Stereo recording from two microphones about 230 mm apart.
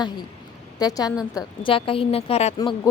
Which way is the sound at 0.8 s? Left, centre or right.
Centre.